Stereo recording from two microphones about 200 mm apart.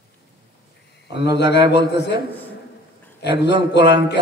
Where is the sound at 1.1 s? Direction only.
60° left (ahead or behind).